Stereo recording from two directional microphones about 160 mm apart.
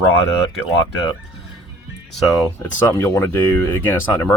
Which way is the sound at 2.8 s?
15° left (ahead or behind).